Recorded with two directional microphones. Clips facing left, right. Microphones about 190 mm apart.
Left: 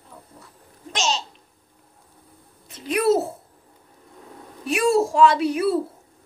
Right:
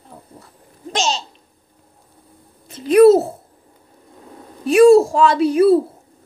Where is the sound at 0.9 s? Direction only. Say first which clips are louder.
Right 4 dB; 30° right (ahead or behind).